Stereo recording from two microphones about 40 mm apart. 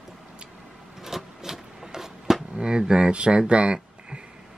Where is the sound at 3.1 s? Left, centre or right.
Right.